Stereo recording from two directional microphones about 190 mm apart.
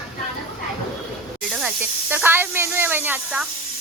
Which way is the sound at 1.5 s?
10° right (ahead or behind).